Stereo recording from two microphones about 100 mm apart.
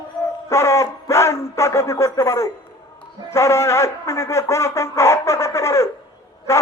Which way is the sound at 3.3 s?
30° left (ahead or behind).